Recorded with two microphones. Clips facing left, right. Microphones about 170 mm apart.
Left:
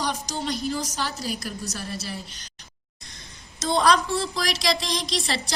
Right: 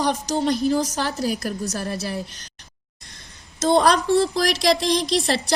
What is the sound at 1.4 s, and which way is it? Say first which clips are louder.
Speech: right 6 dB; 60° right (ahead or behind).